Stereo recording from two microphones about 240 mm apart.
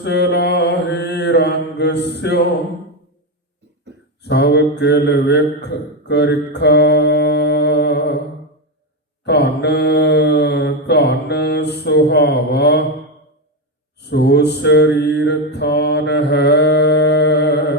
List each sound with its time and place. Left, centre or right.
0.0 s mantra: left
4.2 s mantra: left
9.2 s mantra: left
14.0 s mantra: left